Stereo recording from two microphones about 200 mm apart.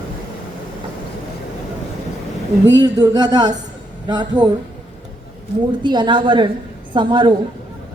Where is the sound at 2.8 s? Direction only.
20° right (ahead or behind).